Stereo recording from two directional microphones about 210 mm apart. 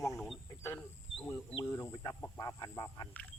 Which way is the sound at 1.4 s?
10° left (ahead or behind).